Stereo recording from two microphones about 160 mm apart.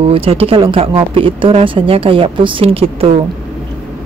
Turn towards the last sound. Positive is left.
turn(degrees=-35)  # may be behind; listen again after turning